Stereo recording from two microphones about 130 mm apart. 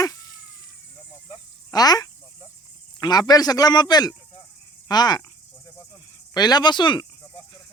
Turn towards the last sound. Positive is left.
turn(degrees=35)  # may be behind; listen again after turning